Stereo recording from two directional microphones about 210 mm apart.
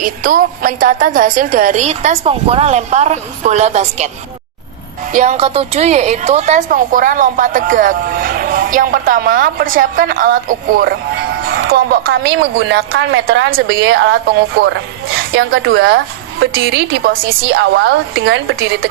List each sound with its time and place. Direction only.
0.0 s a woman's voice: 40° right (ahead or behind)
5.1 s a woman's voice: 35° right (ahead or behind)
10.8 s a woman's voice: 50° right (ahead or behind)